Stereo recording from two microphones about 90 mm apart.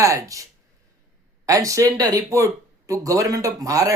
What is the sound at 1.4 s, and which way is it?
Speech, 40° right (ahead or behind).